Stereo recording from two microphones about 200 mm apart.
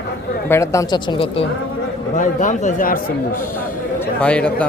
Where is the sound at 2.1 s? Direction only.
40° left (ahead or behind).